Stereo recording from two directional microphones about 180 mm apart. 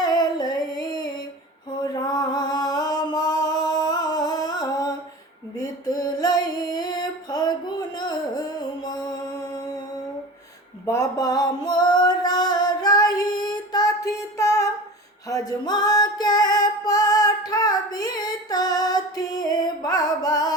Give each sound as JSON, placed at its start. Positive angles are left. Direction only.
{"t": 0.0, "sound": "female singing", "side_deg": 20}
{"t": 1.8, "sound": "music", "side_deg": 20}
{"t": 5.5, "sound": "a sound", "side_deg": 20}
{"t": 10.8, "sound": "music", "side_deg": 20}